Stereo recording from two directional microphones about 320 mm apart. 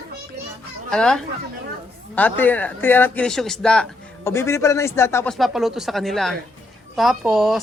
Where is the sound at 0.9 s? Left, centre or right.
Centre.